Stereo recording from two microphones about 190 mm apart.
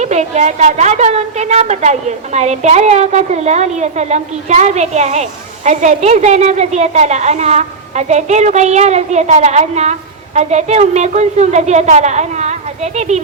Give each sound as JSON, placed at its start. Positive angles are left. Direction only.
{"t": 0.0, "sound": "a woman's voice", "side_deg": -35}